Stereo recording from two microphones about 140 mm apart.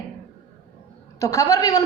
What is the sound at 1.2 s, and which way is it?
Speech, 25° left (ahead or behind).